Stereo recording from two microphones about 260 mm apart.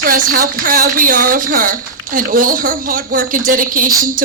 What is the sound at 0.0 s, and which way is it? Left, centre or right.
A man's voice, right.